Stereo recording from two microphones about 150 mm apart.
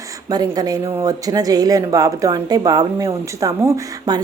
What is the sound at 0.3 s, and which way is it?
Speech, 25° right (ahead or behind).